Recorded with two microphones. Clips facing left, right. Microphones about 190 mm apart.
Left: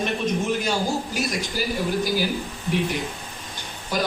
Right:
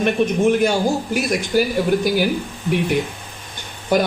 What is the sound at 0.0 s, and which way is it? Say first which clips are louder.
Speech: right 8 dB; 55° right (ahead or behind).